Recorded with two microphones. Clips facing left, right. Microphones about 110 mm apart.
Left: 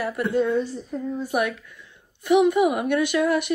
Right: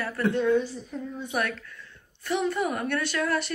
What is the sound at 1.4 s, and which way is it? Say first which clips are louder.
A woman's voice: left 5 dB; 15° left (ahead or behind).